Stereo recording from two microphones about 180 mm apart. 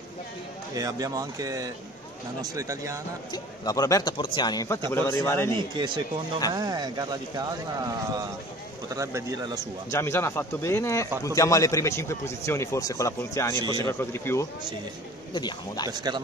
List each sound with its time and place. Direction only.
0.7 s speech: 20° right (ahead or behind)
3.3 s speech: 20° left (ahead or behind)
6.5 s speech: 20° right (ahead or behind)
9.6 s a man's voice: 15° left (ahead or behind)
15.9 s speech: 25° right (ahead or behind)